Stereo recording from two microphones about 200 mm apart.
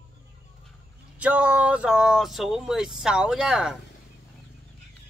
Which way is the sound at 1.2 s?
5° right (ahead or behind).